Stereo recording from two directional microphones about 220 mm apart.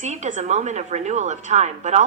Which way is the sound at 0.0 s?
30° right (ahead or behind).